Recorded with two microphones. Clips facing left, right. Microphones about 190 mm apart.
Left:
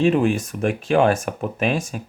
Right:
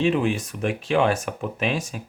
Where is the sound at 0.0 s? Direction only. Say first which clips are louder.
Left 4 dB; 45° left (ahead or behind).